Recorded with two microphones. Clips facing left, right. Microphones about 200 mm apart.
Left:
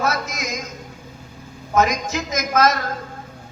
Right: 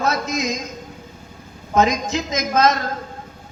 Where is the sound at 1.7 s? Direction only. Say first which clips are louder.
Right 1 dB; 25° right (ahead or behind).